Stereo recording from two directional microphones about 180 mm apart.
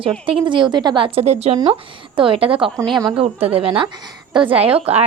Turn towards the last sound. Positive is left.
turn(degrees=-35)  # may be behind; listen again after turning